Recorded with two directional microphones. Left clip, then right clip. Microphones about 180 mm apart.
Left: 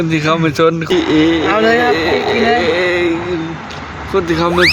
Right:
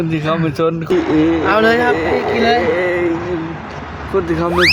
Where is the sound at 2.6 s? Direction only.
5° left (ahead or behind).